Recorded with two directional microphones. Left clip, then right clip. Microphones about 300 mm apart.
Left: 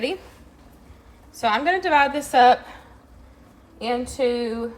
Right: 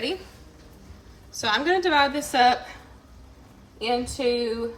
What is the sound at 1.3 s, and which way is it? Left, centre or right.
A woman's voice, left.